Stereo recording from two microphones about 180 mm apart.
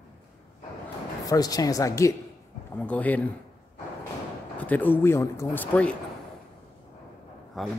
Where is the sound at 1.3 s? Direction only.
20° left (ahead or behind).